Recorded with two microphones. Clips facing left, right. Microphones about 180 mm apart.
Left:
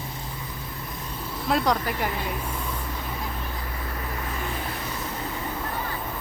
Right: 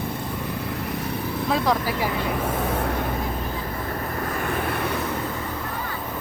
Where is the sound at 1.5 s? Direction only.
Centre (ahead or behind).